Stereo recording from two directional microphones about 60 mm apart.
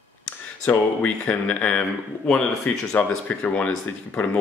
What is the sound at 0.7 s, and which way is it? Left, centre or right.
Speech, left.